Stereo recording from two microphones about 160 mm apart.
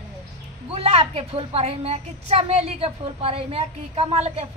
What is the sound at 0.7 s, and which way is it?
A woman's voice, 35° right (ahead or behind).